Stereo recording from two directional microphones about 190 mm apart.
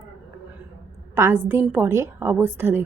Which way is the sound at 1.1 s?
15° right (ahead or behind).